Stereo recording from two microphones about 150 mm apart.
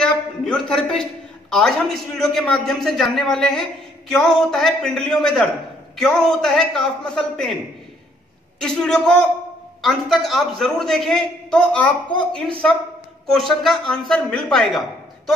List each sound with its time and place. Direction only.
0.0 s a sound: 5° left (ahead or behind)
1.5 s a man's voice: 5° left (ahead or behind)
8.5 s a man's voice: 5° left (ahead or behind)